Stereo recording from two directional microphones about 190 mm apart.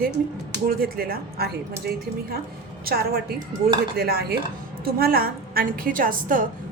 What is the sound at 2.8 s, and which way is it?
Speech, 55° right (ahead or behind).